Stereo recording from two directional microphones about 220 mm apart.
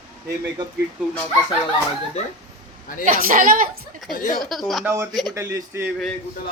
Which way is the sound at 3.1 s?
40° right (ahead or behind).